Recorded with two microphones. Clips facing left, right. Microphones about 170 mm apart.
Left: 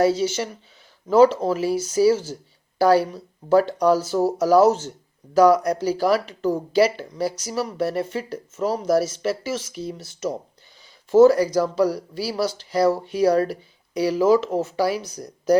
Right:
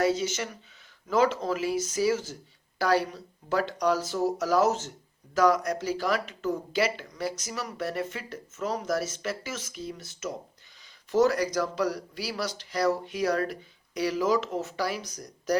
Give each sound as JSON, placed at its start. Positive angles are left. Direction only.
{"t": 0.0, "sound": "speech", "side_deg": 35}